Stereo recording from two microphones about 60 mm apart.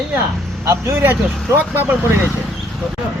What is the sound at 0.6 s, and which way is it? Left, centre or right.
A man's voice, right.